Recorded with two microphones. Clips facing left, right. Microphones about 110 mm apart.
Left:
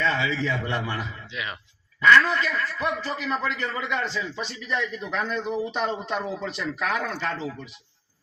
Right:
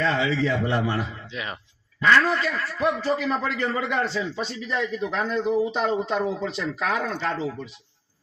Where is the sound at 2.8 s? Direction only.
25° right (ahead or behind).